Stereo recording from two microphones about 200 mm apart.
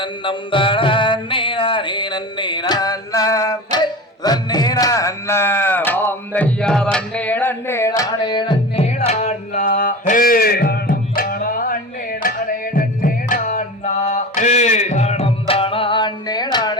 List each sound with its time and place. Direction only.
0.0 s music: 25° left (ahead or behind)